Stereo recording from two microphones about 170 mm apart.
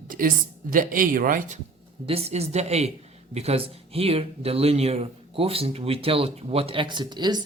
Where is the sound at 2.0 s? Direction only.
35° right (ahead or behind).